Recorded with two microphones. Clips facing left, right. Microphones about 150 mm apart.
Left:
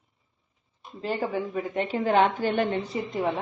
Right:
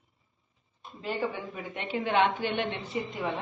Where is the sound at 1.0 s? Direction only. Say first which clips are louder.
Left 4 dB; 40° left (ahead or behind).